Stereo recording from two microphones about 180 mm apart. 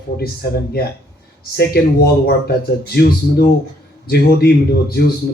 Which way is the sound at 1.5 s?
60° left (ahead or behind).